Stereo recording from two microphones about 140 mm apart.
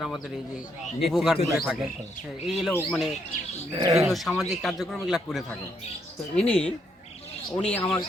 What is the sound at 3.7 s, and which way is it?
Speech, 40° right (ahead or behind).